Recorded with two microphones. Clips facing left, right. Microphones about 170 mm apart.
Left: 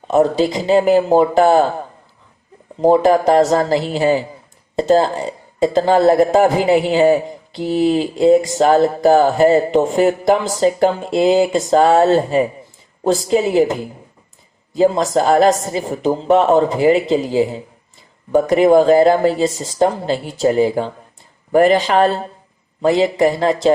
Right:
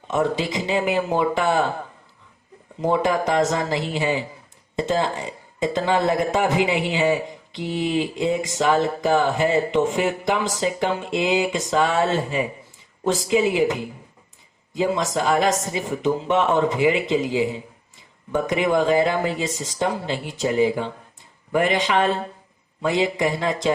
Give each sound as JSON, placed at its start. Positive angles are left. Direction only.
{"t": 0.1, "sound": "speech", "side_deg": 35}
{"t": 2.8, "sound": "speech", "side_deg": 35}